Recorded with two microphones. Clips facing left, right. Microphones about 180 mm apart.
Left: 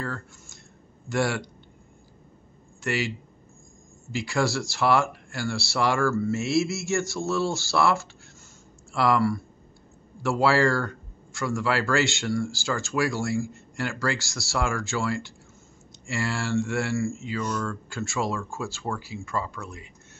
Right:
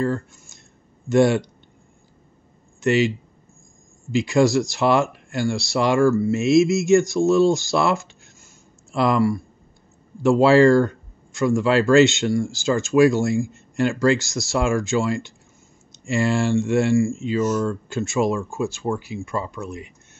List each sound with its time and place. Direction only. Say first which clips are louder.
0.0 s speech: right 11 dB; 20° right (ahead or behind)
2.8 s speech: right 10 dB; 20° right (ahead or behind)
4.1 s speech: right 9 dB; 20° right (ahead or behind)